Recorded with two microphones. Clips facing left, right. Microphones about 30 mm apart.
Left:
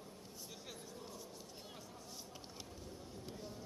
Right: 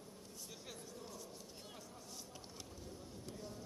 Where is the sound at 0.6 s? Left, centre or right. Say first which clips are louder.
Even; centre.